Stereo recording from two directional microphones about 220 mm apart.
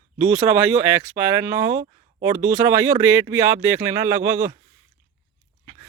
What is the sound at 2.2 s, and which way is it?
Speech, 10° right (ahead or behind).